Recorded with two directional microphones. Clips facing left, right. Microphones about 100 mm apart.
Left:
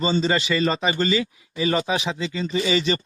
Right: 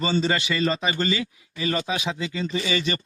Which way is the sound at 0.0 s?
30° left (ahead or behind).